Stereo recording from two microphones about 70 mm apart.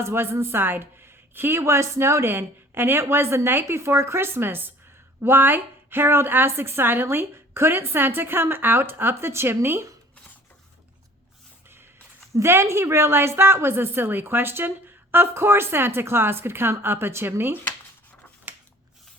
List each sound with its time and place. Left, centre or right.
0.0 s a woman's voice: right
12.3 s a woman's voice: right